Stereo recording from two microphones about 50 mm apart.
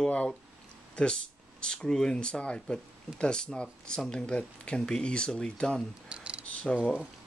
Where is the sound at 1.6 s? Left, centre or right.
Centre.